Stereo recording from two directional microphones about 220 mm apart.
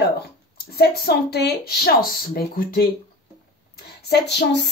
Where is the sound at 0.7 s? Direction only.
45° left (ahead or behind).